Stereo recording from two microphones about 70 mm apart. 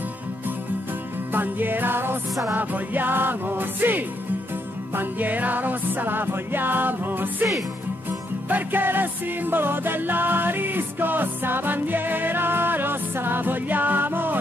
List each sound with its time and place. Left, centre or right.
1.3 s music: right
8.5 s music: right